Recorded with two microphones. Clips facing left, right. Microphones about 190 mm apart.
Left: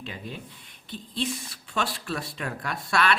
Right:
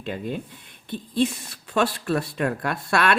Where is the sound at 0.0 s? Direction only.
50° right (ahead or behind).